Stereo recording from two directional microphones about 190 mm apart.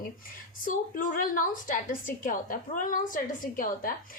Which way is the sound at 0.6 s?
45° left (ahead or behind).